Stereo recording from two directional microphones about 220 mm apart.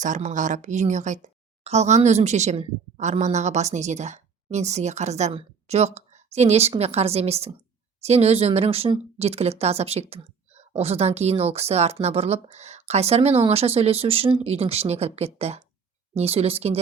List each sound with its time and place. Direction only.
0.0 s a woman's voice: 35° right (ahead or behind)